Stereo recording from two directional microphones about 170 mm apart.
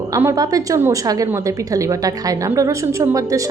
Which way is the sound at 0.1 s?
20° right (ahead or behind).